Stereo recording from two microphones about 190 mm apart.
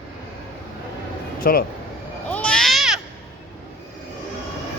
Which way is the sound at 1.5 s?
50° left (ahead or behind).